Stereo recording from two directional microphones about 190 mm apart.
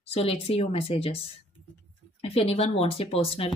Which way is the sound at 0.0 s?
30° left (ahead or behind).